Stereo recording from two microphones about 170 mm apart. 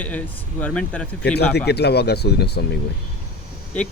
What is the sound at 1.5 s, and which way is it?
Speech, 75° left (ahead or behind).